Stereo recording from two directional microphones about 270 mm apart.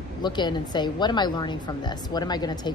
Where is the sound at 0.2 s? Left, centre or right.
Centre.